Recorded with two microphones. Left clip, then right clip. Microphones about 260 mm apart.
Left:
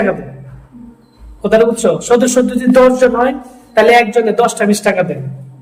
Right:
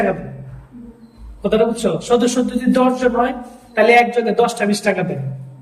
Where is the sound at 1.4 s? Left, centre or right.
Centre.